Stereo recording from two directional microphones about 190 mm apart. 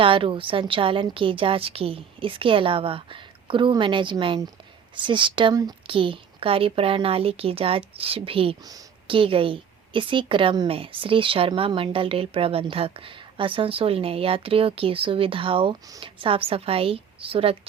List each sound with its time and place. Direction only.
0.0 s a woman's voice: 25° right (ahead or behind)